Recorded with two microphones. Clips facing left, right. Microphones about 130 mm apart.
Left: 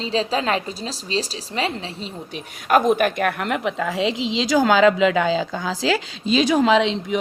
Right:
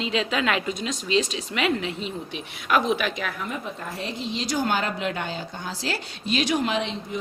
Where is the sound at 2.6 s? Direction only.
50° left (ahead or behind); by 7.2 s 90° left.